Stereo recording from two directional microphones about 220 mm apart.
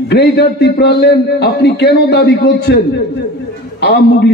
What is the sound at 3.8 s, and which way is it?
Speech, 50° left (ahead or behind).